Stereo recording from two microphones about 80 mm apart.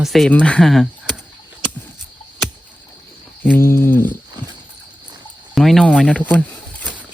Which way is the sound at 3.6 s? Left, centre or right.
Left.